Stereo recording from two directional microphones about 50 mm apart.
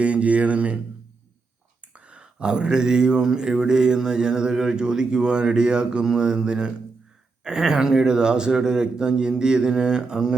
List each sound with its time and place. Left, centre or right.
0.0 s speech: right
1.9 s speech: right